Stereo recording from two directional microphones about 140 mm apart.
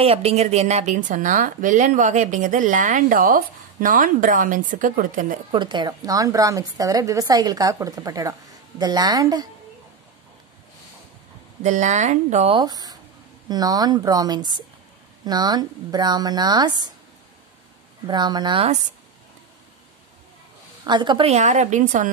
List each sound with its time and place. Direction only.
0.0 s a woman's voice: 45° right (ahead or behind); by 5.4 s 75° right (ahead or behind)
5.5 s a woman's voice: 35° right (ahead or behind)
11.6 s a woman's voice: 60° right (ahead or behind)
12.5 s a woman's voice: 30° right (ahead or behind)
18.0 s speech: 30° right (ahead or behind)
20.8 s speech: 30° right (ahead or behind)
21.3 s a woman's voice: 55° right (ahead or behind)